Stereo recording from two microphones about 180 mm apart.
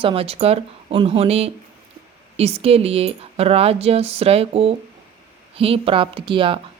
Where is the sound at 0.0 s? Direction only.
30° right (ahead or behind).